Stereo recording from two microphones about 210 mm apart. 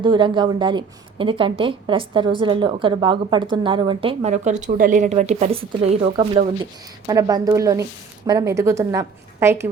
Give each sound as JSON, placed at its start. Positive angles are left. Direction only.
{"t": 0.0, "sound": "a woman's voice", "side_deg": -25}